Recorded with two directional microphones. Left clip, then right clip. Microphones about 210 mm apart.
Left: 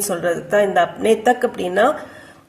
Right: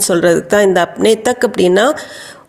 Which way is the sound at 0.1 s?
40° right (ahead or behind).